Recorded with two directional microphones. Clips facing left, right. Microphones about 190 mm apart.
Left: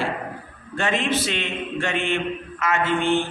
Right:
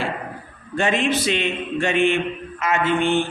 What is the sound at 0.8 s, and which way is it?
Speech, 15° right (ahead or behind).